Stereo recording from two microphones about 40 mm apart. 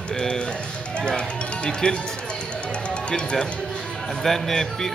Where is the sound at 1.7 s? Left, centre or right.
Left.